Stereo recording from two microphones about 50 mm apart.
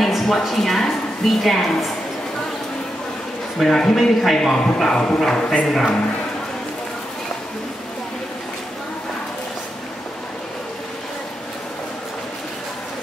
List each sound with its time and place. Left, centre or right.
0.0 s a woman's voice: centre
3.5 s speech: centre
5.7 s speech: centre